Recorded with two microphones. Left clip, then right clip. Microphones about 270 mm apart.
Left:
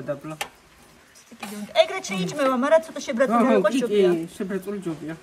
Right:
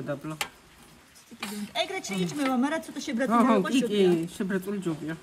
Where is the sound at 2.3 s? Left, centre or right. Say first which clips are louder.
Left 10 dB; right.